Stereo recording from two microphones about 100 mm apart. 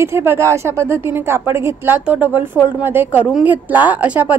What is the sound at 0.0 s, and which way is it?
A woman's voice, 25° right (ahead or behind).